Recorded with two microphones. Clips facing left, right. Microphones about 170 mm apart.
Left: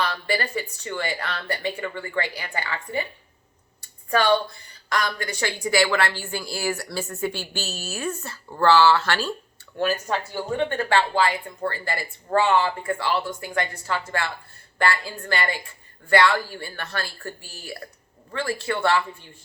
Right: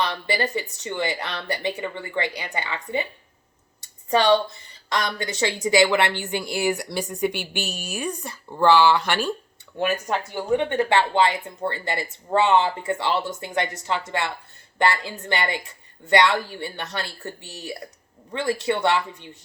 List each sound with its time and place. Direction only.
0.0 s a woman's voice: 20° right (ahead or behind)